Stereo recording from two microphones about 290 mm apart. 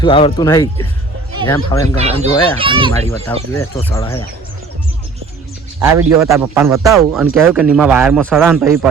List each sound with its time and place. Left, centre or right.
0.0 s speech: centre
2.6 s a man's voice: centre
3.3 s speech: centre
5.8 s a man's voice: centre